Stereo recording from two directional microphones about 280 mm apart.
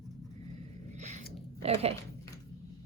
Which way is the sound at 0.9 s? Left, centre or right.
Right.